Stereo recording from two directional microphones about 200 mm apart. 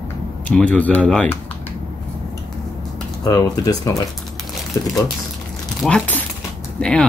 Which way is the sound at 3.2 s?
15° left (ahead or behind).